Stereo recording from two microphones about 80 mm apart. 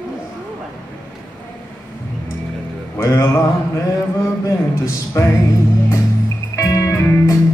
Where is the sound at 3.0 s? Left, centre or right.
Left.